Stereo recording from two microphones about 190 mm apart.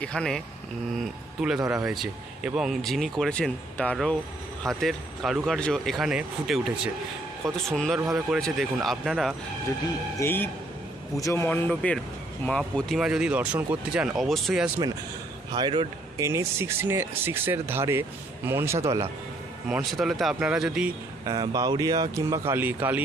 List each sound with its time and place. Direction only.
0.0 s speech: 5° left (ahead or behind)
1.7 s speech: 5° right (ahead or behind)
10.2 s speech: 10° left (ahead or behind)
15.5 s speech: 25° right (ahead or behind)
19.6 s speech: centre (ahead or behind)
21.2 s speech: 20° right (ahead or behind)